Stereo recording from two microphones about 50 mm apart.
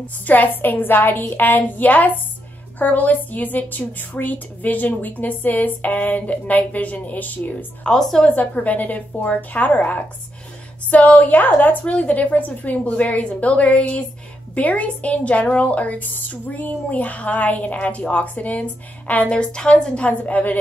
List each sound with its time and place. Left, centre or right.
0.0 s a woman's voice: left
7.8 s a woman's voice: centre
8.3 s a woman's voice: left
10.9 s a woman's voice: left
11.8 s a woman's voice: left
19.3 s a woman's voice: centre